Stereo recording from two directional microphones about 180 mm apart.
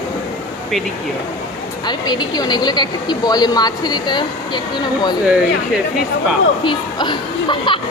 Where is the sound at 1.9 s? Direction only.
25° left (ahead or behind).